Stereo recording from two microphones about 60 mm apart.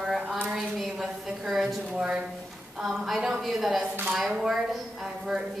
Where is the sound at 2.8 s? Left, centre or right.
Centre.